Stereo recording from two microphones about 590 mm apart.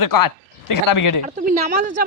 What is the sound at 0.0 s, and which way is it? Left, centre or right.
Speech, left.